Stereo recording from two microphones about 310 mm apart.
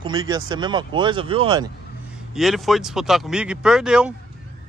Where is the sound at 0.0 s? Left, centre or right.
Centre.